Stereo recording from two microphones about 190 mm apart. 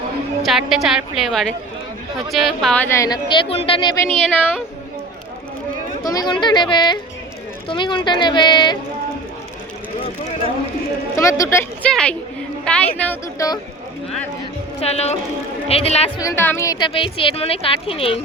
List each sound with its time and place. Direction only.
0.4 s a woman's voice: centre (ahead or behind); by 4.0 s 25° left (ahead or behind)
4.4 s a woman's voice: 5° right (ahead or behind)
6.0 s speech: 20° left (ahead or behind)
11.2 s speech: 15° left (ahead or behind)
11.9 s a woman's voice: 5° left (ahead or behind)
14.8 s a woman's voice: 35° left (ahead or behind)
16.2 s speech: 10° left (ahead or behind); by 18.2 s 30° left (ahead or behind)